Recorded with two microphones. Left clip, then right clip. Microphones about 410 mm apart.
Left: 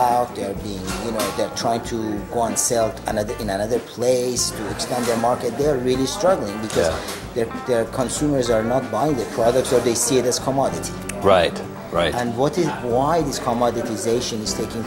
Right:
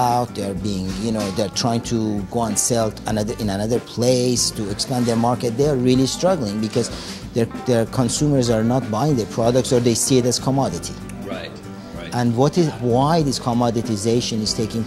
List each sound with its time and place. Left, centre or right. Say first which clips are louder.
0.0 s music: left 1 dB; right
1.4 s speech: right 2 dB; right
11.2 s speech: left 16 dB; left
12.1 s speech: right 1 dB; right